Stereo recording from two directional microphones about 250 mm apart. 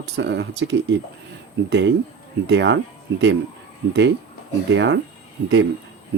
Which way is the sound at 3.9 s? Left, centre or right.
Right.